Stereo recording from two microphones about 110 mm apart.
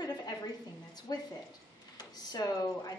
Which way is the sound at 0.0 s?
35° left (ahead or behind).